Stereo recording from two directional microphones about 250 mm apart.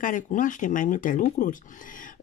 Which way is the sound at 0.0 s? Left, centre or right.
Left.